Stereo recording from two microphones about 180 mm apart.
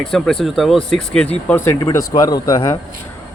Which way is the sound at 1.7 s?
25° left (ahead or behind).